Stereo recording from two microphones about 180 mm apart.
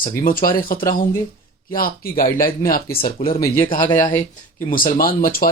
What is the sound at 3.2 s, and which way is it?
Speech, 30° left (ahead or behind).